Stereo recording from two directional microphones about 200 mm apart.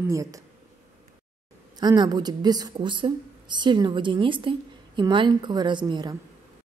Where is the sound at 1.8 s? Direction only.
20° right (ahead or behind).